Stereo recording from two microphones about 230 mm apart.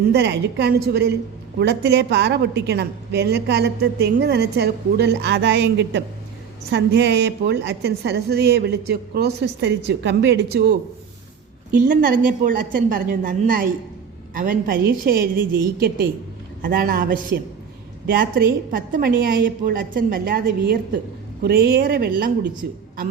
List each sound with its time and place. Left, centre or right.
0.1 s a woman's voice: right